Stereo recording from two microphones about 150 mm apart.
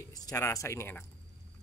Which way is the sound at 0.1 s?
25° left (ahead or behind).